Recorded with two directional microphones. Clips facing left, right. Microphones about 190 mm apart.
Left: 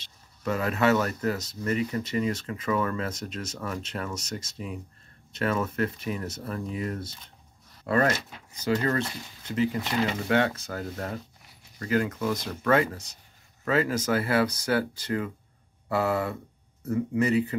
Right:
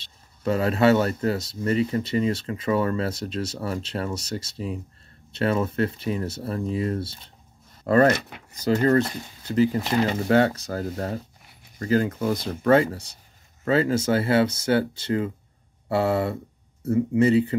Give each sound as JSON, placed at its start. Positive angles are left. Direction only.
{"t": 0.4, "sound": "speech", "side_deg": -30}
{"t": 8.3, "sound": "speech", "side_deg": -65}
{"t": 8.6, "sound": "speech", "side_deg": -35}